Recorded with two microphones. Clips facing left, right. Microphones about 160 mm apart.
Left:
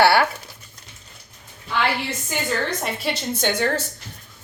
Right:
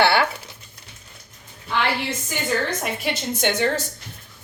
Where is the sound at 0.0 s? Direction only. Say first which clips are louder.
Left 2 dB; 25° right (ahead or behind).